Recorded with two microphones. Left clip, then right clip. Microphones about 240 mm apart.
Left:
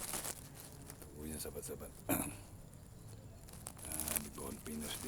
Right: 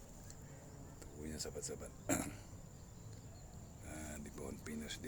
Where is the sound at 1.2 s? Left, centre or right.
Centre.